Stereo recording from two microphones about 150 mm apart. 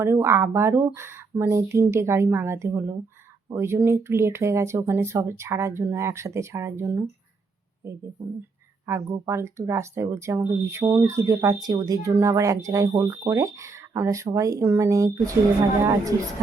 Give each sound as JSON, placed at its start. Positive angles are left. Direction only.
{"t": 0.0, "sound": "speech", "side_deg": -15}
{"t": 9.1, "sound": "speech", "side_deg": -20}